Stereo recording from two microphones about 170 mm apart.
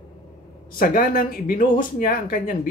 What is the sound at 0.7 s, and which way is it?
Speech, 55° left (ahead or behind).